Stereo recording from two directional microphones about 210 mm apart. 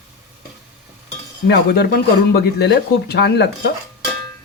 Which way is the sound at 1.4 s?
50° left (ahead or behind).